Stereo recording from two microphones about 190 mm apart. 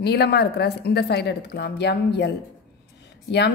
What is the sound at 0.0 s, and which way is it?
A woman's voice, 60° left (ahead or behind).